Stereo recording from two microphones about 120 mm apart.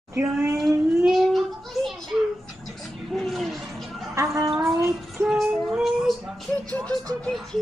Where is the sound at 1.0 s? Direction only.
Centre (ahead or behind).